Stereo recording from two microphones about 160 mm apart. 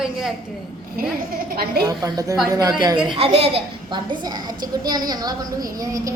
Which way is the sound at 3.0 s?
35° right (ahead or behind).